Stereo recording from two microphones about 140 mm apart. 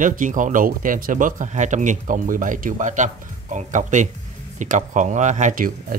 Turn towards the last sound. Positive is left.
turn(degrees=-70)  # may be behind; listen again after turning